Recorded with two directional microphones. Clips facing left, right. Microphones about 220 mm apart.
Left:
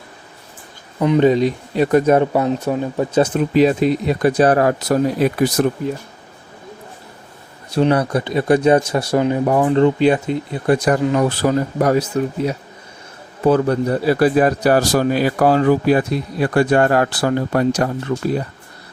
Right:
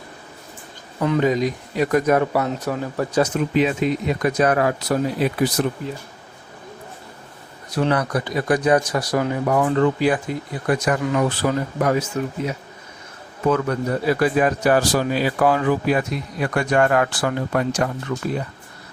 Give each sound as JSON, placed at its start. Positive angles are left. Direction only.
{"t": 0.9, "sound": "a man's voice", "side_deg": 20}
{"t": 7.7, "sound": "a man's voice", "side_deg": 25}